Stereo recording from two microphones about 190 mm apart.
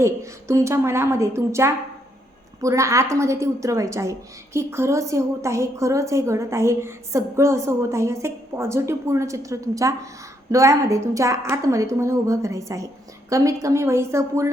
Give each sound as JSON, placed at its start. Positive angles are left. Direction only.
{"t": 0.0, "sound": "a woman's voice", "side_deg": -15}